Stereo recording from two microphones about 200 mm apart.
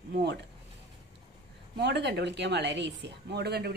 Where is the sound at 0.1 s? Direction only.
55° right (ahead or behind).